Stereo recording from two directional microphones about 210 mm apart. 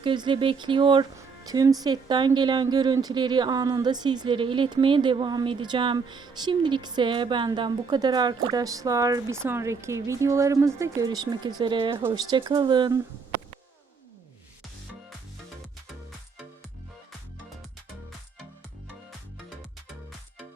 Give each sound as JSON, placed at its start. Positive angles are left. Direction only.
{"t": 0.0, "sound": "a woman's voice", "side_deg": -20}